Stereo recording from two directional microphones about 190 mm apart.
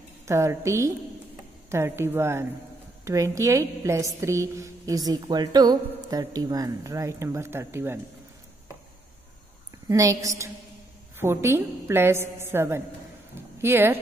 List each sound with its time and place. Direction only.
0.2 s a woman's voice: 15° right (ahead or behind)
9.8 s a woman's voice: 15° right (ahead or behind)
13.3 s a sound: 10° right (ahead or behind)